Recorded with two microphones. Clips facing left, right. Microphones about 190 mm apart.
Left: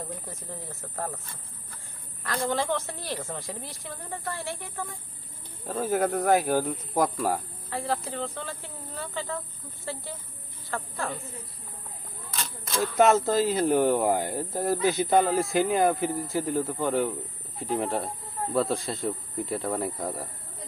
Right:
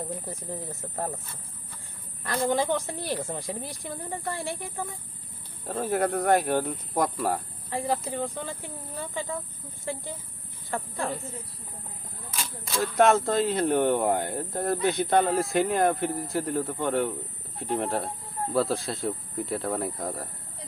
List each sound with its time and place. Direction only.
0.3 s a woman's voice: 15° right (ahead or behind)
2.2 s a woman's voice: 15° right (ahead or behind)
5.6 s speech: centre (ahead or behind)
7.7 s a woman's voice: 15° right (ahead or behind)
12.8 s speech: centre (ahead or behind)